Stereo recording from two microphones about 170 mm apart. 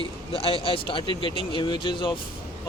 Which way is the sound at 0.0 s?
35° left (ahead or behind).